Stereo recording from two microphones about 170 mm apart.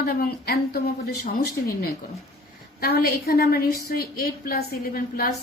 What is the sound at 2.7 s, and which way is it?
A woman's voice, 65° left (ahead or behind).